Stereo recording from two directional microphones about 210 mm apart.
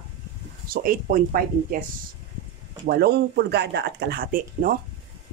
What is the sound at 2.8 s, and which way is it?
Speech, 50° right (ahead or behind).